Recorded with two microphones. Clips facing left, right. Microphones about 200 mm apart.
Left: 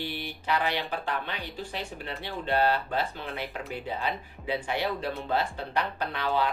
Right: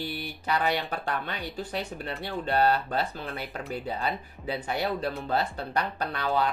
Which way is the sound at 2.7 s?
40° right (ahead or behind).